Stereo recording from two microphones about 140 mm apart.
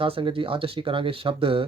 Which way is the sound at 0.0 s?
40° right (ahead or behind).